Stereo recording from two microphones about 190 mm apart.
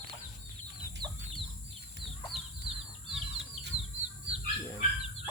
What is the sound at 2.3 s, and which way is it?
Chicken, centre (ahead or behind).